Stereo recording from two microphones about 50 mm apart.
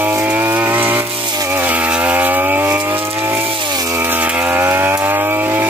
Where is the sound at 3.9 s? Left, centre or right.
Right.